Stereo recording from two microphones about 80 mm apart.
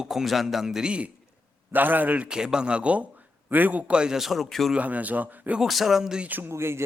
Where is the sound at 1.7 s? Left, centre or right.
Right.